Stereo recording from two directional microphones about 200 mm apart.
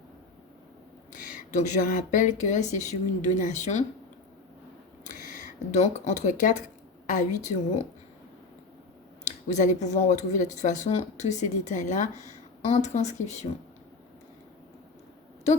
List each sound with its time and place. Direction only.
1.1 s speech: 40° left (ahead or behind)
5.0 s speech: 40° left (ahead or behind)
9.2 s speech: 35° left (ahead or behind)